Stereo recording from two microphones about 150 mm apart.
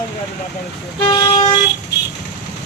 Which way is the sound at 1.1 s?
25° left (ahead or behind).